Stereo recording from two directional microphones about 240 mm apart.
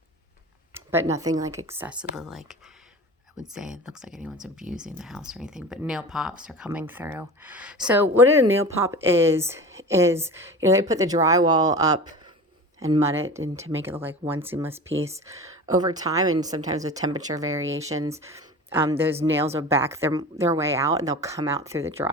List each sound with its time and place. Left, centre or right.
0.7 s speech: centre